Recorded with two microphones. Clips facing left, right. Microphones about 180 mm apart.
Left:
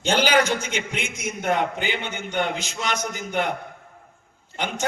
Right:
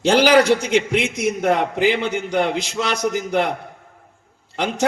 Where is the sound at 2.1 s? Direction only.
35° right (ahead or behind).